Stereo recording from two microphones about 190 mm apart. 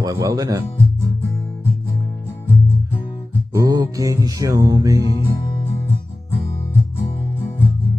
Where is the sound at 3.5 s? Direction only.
20° right (ahead or behind).